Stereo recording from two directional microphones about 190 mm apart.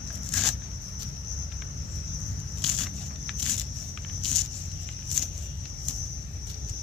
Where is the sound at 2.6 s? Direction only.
Centre (ahead or behind).